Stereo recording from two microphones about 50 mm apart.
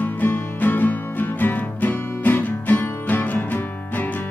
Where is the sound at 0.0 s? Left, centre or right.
Left.